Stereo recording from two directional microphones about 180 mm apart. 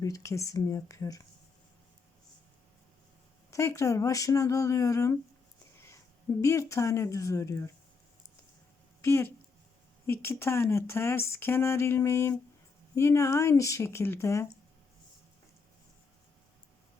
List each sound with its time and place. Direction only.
0.0 s speech: 15° left (ahead or behind)
3.5 s speech: 15° left (ahead or behind)
6.4 s speech: 15° left (ahead or behind)
9.0 s speech: 15° left (ahead or behind)